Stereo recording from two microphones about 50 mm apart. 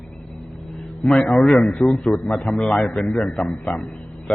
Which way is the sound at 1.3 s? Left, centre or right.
Centre.